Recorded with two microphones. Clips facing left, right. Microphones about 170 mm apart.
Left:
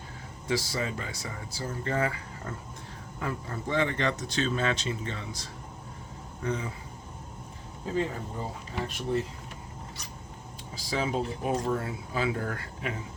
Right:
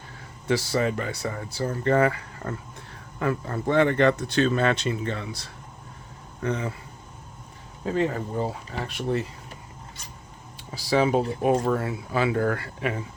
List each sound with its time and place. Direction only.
0.4 s speech: 65° right (ahead or behind)
7.9 s speech: 75° right (ahead or behind)
10.8 s speech: 70° right (ahead or behind)